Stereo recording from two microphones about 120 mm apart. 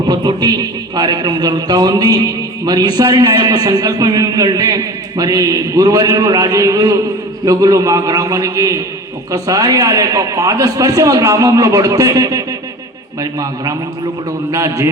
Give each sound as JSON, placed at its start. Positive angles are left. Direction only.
{"t": 0.0, "sound": "a man's voice", "side_deg": -35}
{"t": 14.5, "sound": "a man's voice", "side_deg": -25}